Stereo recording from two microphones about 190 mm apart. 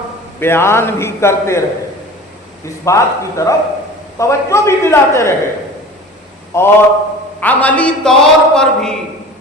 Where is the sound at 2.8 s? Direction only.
15° left (ahead or behind).